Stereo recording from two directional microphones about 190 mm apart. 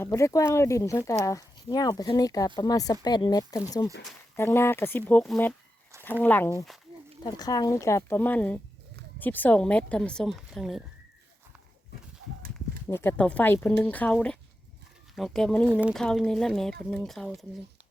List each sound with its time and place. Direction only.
0.0 s speech: 15° left (ahead or behind)
7.2 s speech: 20° left (ahead or behind); by 10.8 s centre (ahead or behind)
12.9 s speech: 10° left (ahead or behind)